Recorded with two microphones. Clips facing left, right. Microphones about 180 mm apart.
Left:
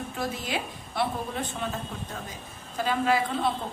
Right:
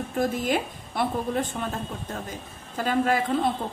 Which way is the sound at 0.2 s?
50° right (ahead or behind).